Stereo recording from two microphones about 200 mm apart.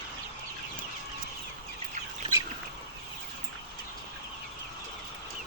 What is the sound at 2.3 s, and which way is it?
Bird, 25° right (ahead or behind).